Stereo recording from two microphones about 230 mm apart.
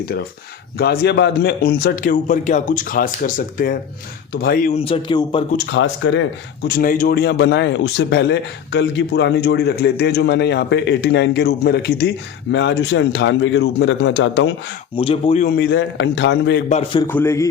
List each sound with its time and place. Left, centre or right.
0.0 s a man's voice: left
5.5 s speech: left
14.9 s speech: left
15.5 s speech: left
16.6 s speech: left
17.0 s a man's voice: centre